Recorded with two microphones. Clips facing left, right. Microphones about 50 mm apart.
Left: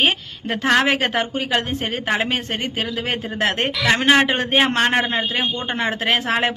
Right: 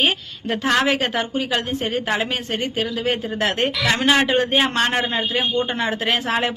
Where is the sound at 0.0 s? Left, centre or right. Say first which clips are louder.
Left 1 dB; left.